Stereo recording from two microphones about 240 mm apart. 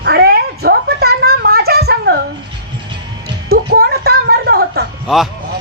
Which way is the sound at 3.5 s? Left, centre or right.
Right.